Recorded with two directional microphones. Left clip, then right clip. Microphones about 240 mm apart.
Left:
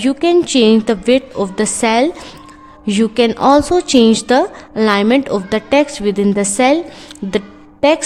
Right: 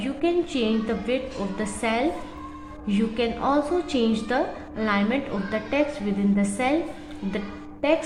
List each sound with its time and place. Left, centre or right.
0.0 s a woman's voice: left
7.3 s music: left